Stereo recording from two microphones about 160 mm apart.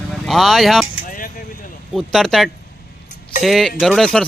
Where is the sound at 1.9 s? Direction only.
Centre (ahead or behind).